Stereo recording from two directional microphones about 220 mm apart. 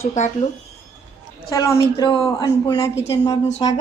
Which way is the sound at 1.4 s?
15° left (ahead or behind).